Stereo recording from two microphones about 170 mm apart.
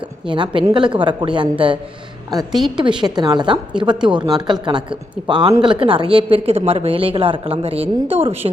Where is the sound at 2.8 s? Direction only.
30° right (ahead or behind).